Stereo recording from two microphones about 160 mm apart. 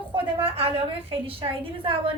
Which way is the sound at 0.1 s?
35° right (ahead or behind).